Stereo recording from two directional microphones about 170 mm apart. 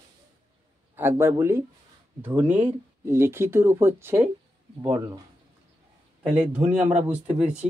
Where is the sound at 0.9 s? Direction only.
15° right (ahead or behind).